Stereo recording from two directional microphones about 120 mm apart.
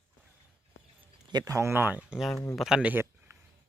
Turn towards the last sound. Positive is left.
turn(degrees=-15)  # may be behind; listen again after turning